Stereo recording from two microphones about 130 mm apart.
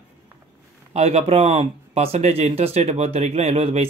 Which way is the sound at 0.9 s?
55° right (ahead or behind).